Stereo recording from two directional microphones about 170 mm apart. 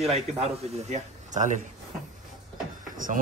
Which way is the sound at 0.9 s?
45° right (ahead or behind).